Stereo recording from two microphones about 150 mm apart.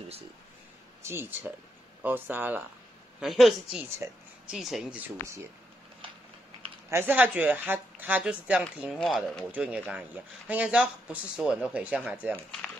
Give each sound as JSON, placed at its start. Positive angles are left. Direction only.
{"t": 1.0, "sound": "speech", "side_deg": -15}
{"t": 3.2, "sound": "a woman's voice", "side_deg": 0}
{"t": 4.0, "sound": "speech", "side_deg": -15}
{"t": 4.5, "sound": "a woman's voice", "side_deg": 0}
{"t": 6.9, "sound": "speech", "side_deg": -15}
{"t": 9.5, "sound": "speech", "side_deg": -5}